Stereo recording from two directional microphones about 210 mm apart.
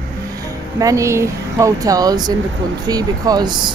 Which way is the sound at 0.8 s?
15° right (ahead or behind).